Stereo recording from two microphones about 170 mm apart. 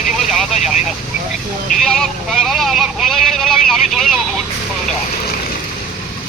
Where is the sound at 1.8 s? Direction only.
5° left (ahead or behind).